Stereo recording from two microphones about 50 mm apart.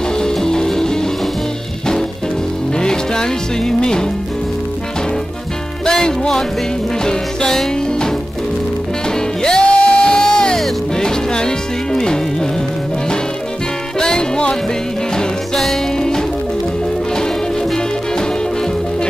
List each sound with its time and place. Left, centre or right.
0.2 s music: centre
2.7 s music: centre
5.9 s music: centre
9.4 s music: centre
13.9 s music: centre